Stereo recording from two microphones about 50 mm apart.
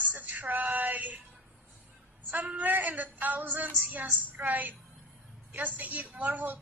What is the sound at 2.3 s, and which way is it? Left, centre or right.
A woman's voice, right.